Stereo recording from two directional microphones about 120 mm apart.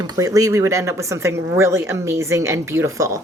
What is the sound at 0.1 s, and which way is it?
Speech, 30° right (ahead or behind).